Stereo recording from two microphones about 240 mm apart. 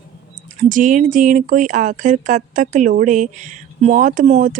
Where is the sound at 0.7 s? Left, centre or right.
Right.